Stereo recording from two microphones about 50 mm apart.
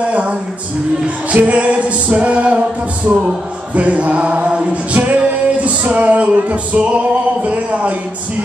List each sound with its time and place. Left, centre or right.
0.0 s music: right